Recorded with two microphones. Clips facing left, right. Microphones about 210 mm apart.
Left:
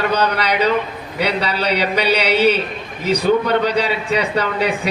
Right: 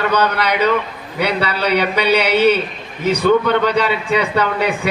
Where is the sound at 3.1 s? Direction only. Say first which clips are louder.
Right 2 dB; 40° left (ahead or behind).